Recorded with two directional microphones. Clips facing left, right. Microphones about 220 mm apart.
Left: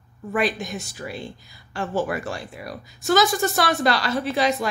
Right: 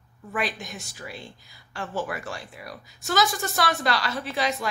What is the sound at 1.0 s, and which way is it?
A woman's voice, 40° left (ahead or behind).